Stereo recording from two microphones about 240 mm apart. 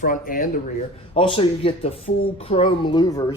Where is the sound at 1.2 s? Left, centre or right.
Left.